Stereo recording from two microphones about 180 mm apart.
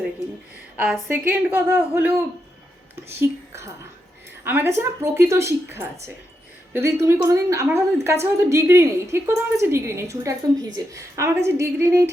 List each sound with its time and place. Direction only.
0.8 s a woman's voice: 5° right (ahead or behind)